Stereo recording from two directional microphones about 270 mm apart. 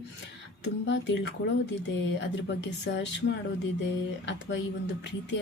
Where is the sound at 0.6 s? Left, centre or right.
Left.